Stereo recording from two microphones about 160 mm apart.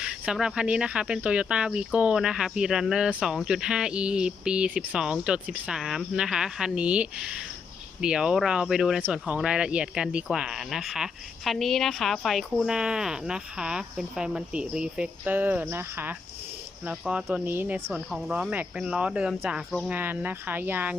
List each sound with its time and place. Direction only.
0.0 s speech: 5° right (ahead or behind)